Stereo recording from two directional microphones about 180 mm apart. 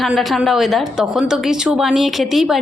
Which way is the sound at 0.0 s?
Centre (ahead or behind).